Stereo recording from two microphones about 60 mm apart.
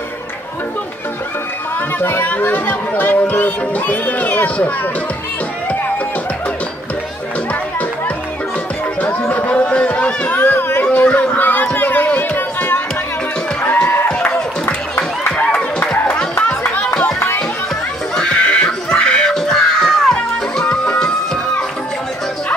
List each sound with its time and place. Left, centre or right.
2.0 s speech: left
2.2 s speech: left
9.2 s chatter: left
14.0 s a sound: centre
14.7 s music: left
18.1 s neigh: centre
18.9 s a sound: centre
20.5 s music: centre